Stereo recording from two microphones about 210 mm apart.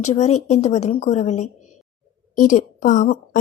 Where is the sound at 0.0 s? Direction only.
30° left (ahead or behind).